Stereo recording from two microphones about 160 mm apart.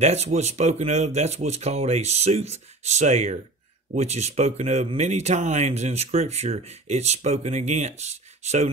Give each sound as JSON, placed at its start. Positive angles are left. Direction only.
{"t": 0.0, "sound": "speech", "side_deg": -45}